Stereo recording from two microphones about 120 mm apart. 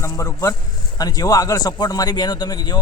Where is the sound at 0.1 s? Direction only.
25° left (ahead or behind).